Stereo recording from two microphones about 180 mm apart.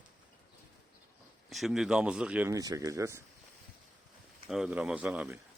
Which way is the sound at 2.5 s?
20° right (ahead or behind).